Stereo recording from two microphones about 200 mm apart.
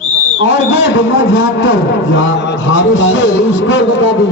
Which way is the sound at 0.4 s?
70° left (ahead or behind).